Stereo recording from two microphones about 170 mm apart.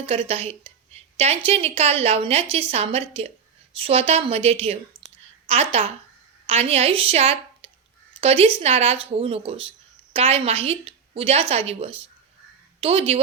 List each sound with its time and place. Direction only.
0.0 s a woman's voice: 35° right (ahead or behind)